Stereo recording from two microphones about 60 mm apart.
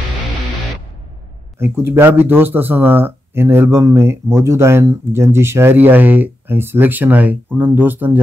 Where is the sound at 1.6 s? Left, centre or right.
Right.